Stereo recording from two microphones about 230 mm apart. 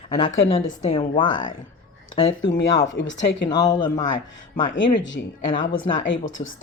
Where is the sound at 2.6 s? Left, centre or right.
Centre.